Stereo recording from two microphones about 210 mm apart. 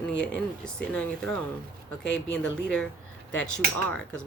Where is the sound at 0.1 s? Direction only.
60° left (ahead or behind).